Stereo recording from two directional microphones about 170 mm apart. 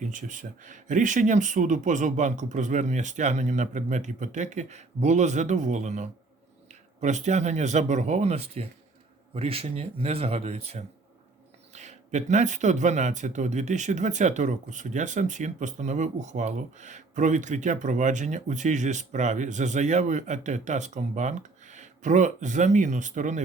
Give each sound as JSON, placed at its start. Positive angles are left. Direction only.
{"t": 0.0, "sound": "speech", "side_deg": -50}